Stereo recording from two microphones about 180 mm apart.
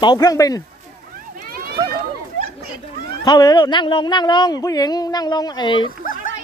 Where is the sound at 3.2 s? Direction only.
25° left (ahead or behind).